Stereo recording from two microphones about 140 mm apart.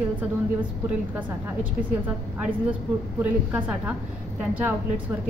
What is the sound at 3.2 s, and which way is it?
A woman's voice, 10° right (ahead or behind).